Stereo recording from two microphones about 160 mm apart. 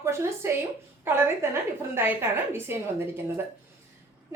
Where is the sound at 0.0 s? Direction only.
15° right (ahead or behind).